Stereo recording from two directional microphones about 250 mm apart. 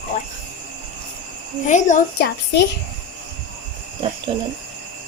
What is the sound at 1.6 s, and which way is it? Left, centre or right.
Speech, left.